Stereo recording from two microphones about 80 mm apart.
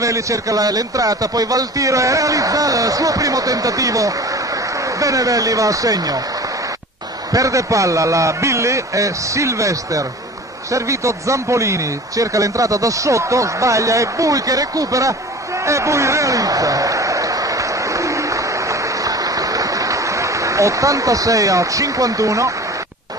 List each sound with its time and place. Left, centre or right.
0.0 s speech: right
7.3 s a man's voice: right
15.6 s a sound: right